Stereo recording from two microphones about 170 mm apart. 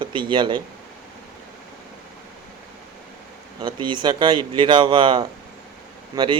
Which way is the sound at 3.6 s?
25° right (ahead or behind).